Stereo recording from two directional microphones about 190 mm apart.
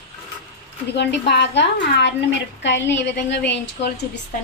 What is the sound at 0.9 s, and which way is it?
A woman's voice, 65° left (ahead or behind).